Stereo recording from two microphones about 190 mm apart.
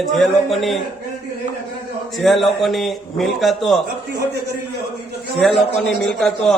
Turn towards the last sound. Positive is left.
turn(degrees=5)  # may be behind; listen again after turning